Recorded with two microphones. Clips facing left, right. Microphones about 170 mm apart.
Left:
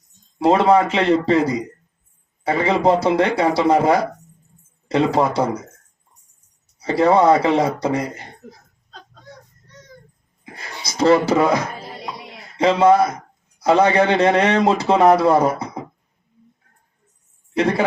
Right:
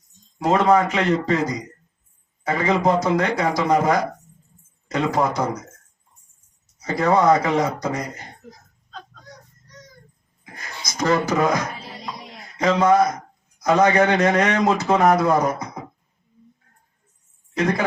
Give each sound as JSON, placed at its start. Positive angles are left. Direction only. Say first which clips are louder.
{"t": 0.3, "sound": "a man's voice", "louder": "left 3 dB", "side_deg": 30}
{"t": 6.7, "sound": "a man's voice", "louder": "left 4 dB", "side_deg": 30}
{"t": 10.4, "sound": "a sound", "louder": "left 3 dB", "side_deg": 30}
{"t": 12.5, "sound": "a man's voice", "louder": "left 3 dB", "side_deg": 30}
{"t": 17.6, "sound": "speech", "louder": "left 3 dB", "side_deg": 30}